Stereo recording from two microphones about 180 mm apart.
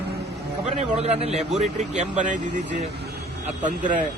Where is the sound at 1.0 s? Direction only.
35° right (ahead or behind).